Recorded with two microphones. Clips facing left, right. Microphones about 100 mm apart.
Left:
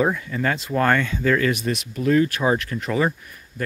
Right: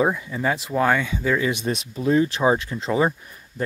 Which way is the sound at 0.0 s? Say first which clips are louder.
Even; 15° right (ahead or behind).